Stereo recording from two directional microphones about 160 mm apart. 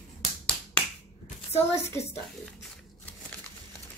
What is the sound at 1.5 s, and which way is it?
Child singing, 15° left (ahead or behind).